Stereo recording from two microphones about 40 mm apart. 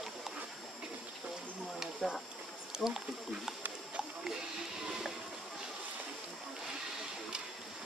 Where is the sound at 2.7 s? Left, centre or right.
Centre.